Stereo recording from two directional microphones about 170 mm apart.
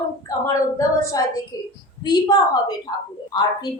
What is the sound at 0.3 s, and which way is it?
A woman's voice, 20° left (ahead or behind).